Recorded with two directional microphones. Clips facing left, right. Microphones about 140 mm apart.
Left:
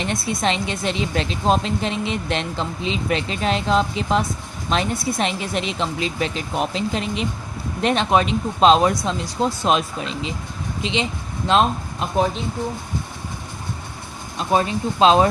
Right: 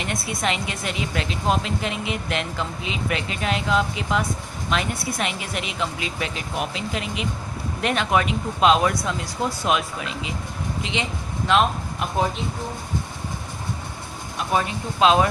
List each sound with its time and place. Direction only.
0.0 s a woman's voice: 30° left (ahead or behind)
11.4 s speech: 30° left (ahead or behind)
14.3 s a woman's voice: 30° left (ahead or behind)